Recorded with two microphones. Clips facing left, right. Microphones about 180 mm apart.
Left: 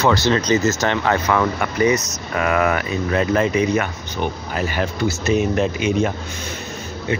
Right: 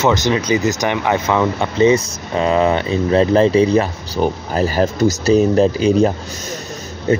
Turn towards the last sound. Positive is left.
turn(degrees=-40)  # may be behind; listen again after turning